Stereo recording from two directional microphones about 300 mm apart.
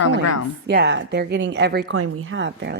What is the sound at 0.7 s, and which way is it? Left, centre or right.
Speech, right.